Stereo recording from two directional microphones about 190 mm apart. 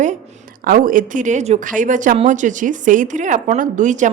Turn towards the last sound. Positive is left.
turn(degrees=-40)  # may be behind; listen again after turning